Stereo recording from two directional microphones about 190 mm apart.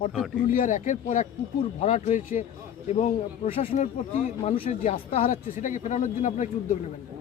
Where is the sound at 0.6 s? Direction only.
45° left (ahead or behind).